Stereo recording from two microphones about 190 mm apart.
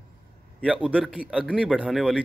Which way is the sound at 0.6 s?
5° right (ahead or behind).